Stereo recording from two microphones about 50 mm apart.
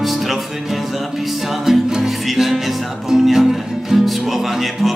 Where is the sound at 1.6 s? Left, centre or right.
Centre.